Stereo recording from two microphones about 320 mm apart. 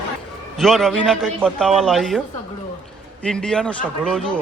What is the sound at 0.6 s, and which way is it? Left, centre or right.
A man's voice, centre.